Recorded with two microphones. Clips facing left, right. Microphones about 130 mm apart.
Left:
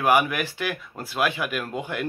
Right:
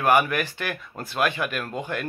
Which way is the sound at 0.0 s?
10° left (ahead or behind).